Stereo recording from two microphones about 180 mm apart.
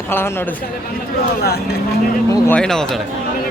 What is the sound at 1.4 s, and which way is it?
Speech, 60° left (ahead or behind).